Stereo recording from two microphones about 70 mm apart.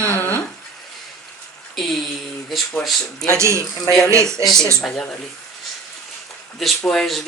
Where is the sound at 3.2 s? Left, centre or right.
Right.